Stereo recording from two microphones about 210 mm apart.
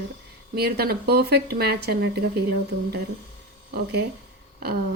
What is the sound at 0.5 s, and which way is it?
Speech, 50° right (ahead or behind).